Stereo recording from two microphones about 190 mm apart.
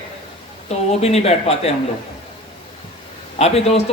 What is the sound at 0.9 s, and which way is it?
Speech, 35° left (ahead or behind).